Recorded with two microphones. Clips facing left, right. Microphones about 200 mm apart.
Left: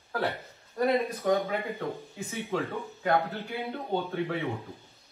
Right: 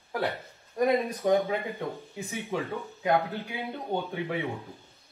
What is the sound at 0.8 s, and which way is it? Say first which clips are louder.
A man's voice: right 1 dB; 15° right (ahead or behind).